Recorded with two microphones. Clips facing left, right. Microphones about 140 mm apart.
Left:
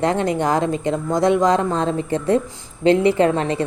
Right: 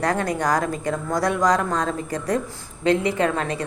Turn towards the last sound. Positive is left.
turn(degrees=25)  # may be behind; listen again after turning